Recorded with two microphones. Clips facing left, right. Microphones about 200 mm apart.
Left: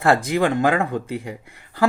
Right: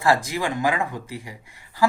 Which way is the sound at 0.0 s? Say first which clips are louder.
Left 4 dB; 60° left (ahead or behind).